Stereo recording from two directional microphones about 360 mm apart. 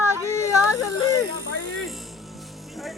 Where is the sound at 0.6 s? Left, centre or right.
Left.